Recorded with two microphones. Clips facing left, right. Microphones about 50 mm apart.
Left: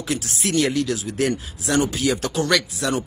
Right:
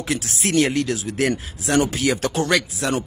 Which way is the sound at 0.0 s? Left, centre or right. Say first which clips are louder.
Right 1 dB; right.